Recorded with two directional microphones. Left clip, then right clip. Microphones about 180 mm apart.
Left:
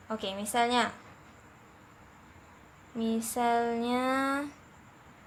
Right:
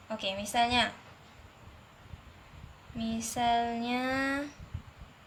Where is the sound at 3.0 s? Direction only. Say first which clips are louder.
Left 2 dB; 35° left (ahead or behind).